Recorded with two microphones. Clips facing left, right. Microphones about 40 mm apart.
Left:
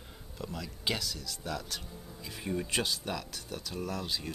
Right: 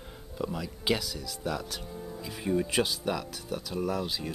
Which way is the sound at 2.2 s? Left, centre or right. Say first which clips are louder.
Right 6 dB; centre.